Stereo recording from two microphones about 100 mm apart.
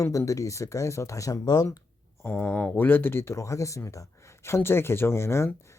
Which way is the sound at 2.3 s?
15° left (ahead or behind).